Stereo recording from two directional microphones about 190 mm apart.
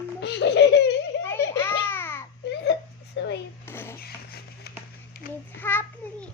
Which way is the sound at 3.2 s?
70° left (ahead or behind).